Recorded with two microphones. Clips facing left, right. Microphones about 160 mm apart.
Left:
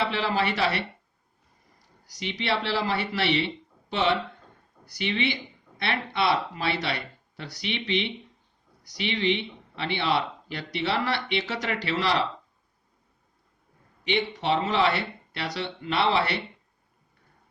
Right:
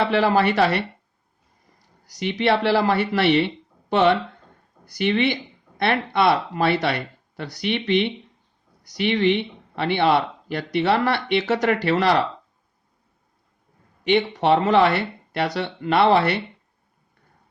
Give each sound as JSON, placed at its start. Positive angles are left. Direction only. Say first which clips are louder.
{"t": 0.1, "sound": "speech", "louder": "right 8 dB", "side_deg": -50}
{"t": 2.0, "sound": "speech", "louder": "right 8 dB", "side_deg": -50}
{"t": 14.0, "sound": "speech", "louder": "right 8 dB", "side_deg": -50}